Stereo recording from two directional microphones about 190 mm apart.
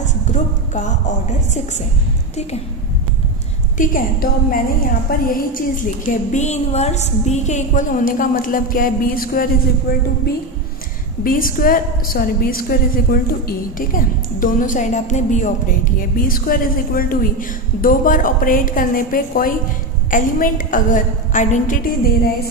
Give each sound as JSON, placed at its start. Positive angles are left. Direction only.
{"t": 0.0, "sound": "speech", "side_deg": 40}
{"t": 3.7, "sound": "a woman's voice", "side_deg": 45}
{"t": 11.2, "sound": "a woman's voice", "side_deg": 45}